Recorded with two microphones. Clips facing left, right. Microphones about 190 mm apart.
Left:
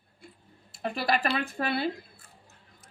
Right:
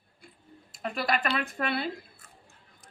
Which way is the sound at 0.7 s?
30° left (ahead or behind).